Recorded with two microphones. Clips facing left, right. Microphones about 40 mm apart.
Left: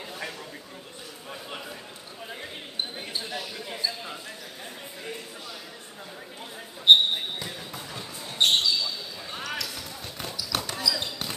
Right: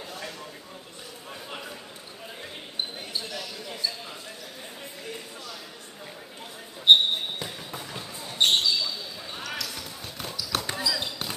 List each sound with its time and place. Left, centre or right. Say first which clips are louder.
3.3 s basketball bounce: left 1 dB; centre
6.9 s basketball bounce: even; centre
10.1 s a sound: even; centre
10.7 s basketball bounce: even; right
11.0 s basketball bounce: even; centre